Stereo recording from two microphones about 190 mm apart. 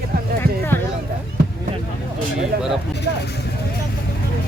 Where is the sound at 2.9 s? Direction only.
65° left (ahead or behind).